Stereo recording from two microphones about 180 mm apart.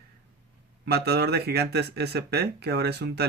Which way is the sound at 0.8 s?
60° right (ahead or behind).